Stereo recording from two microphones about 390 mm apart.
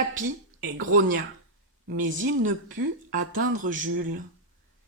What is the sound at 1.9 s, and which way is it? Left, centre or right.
Speech, centre.